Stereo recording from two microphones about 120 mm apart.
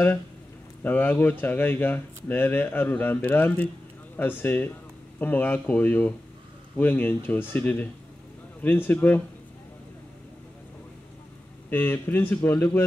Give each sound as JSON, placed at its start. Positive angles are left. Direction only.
{"t": 0.8, "sound": "speech", "side_deg": 15}
{"t": 11.7, "sound": "speech", "side_deg": 15}